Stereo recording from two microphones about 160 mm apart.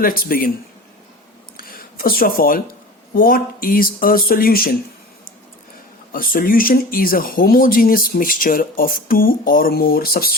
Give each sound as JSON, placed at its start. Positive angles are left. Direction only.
{"t": 0.0, "sound": "speech", "side_deg": 65}
{"t": 1.5, "sound": "a sound", "side_deg": 65}
{"t": 3.2, "sound": "speech", "side_deg": 65}
{"t": 6.1, "sound": "speech", "side_deg": 65}